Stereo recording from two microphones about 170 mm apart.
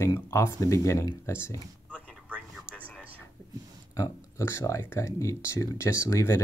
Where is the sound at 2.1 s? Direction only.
5° right (ahead or behind).